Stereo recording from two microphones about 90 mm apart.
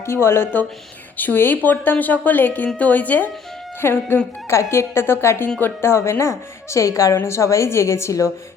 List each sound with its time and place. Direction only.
0.0 s a woman's voice: 30° left (ahead or behind)